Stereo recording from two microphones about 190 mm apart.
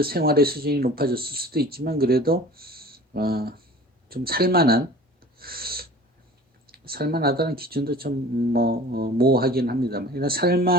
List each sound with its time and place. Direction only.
0.0 s speech: 55° right (ahead or behind)
5.4 s owl: 55° right (ahead or behind)
6.7 s speech: 55° right (ahead or behind)